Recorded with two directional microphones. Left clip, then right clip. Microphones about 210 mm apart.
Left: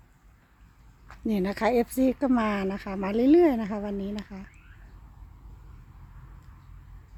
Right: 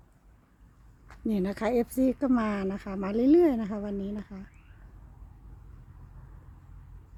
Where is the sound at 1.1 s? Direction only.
5° left (ahead or behind).